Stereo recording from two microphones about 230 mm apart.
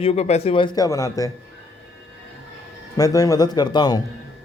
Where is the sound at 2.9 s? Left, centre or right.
Centre.